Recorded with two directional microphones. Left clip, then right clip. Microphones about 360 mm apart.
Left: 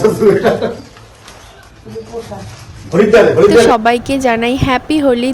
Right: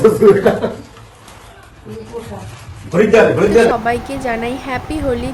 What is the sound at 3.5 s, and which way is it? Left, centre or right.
A woman's voice, left.